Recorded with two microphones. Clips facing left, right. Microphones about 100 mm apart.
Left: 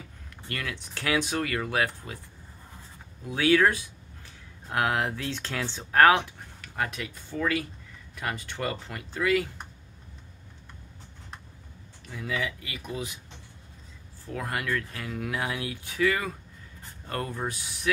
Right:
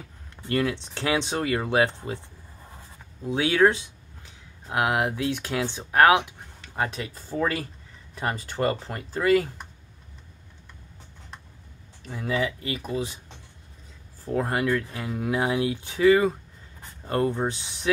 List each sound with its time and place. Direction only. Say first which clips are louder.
0.5 s speech: right 10 dB; 30° right (ahead or behind)
3.3 s speech: right 2 dB; 20° right (ahead or behind); by 9.5 s 40° right (ahead or behind)
12.1 s speech: right 5 dB; 35° right (ahead or behind)
14.2 s speech: right 7 dB; 30° right (ahead or behind)